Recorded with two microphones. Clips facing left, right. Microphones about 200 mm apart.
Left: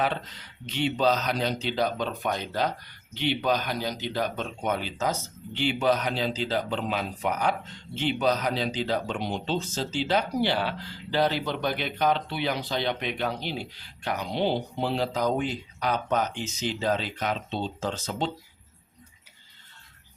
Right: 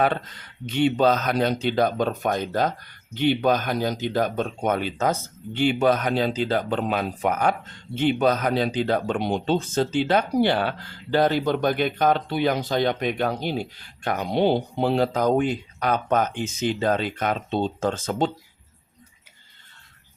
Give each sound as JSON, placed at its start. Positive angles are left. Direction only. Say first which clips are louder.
{"t": 0.0, "sound": "speech", "louder": "right 5 dB", "side_deg": -50}